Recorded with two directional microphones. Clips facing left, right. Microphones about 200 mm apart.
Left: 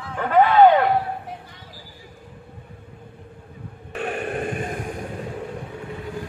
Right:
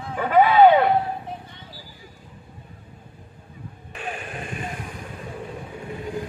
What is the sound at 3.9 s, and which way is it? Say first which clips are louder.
Radio: left 7 dB; 60° left (ahead or behind).